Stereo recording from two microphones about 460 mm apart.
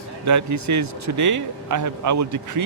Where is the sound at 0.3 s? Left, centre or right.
Right.